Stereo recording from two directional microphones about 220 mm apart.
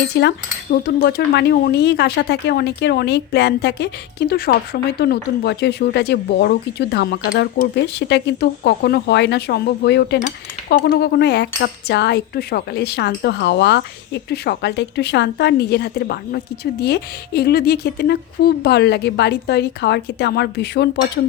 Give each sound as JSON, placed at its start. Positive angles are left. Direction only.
{"t": 0.1, "sound": "speech", "side_deg": 50}